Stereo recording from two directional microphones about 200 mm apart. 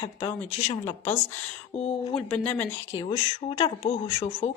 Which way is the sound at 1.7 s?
30° left (ahead or behind).